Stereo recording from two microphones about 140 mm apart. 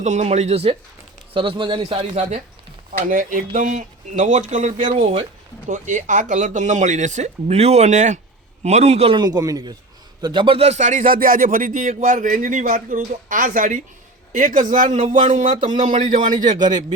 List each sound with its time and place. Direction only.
0.0 s a man's voice: 55° right (ahead or behind)
3.1 s speech: 75° right (ahead or behind)
4.9 s speech: 45° right (ahead or behind)
5.6 s a man's voice: 65° right (ahead or behind)